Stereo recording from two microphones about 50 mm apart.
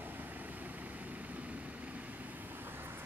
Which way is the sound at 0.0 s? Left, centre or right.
Right.